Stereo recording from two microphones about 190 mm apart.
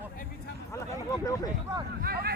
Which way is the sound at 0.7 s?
20° left (ahead or behind).